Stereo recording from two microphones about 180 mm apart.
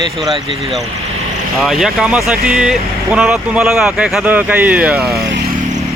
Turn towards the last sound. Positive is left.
turn(degrees=-5)  # may be behind; listen again after turning